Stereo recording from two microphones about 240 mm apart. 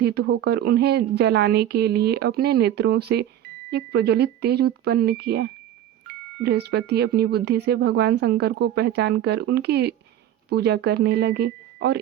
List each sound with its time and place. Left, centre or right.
0.0 s speech: right